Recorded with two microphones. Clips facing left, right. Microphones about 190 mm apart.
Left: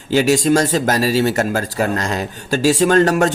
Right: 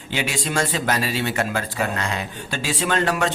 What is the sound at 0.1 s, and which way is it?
Speech, 40° left (ahead or behind).